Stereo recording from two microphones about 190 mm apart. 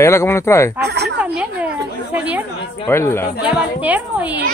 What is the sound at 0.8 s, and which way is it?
Snake, 60° right (ahead or behind).